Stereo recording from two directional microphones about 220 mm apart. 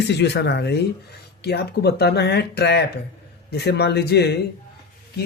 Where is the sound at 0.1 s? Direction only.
50° left (ahead or behind).